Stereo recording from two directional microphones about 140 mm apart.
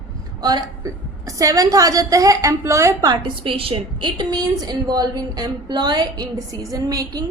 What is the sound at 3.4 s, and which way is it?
A woman's voice, 40° right (ahead or behind).